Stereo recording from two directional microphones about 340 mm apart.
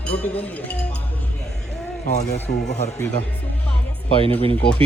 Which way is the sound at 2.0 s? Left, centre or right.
Left.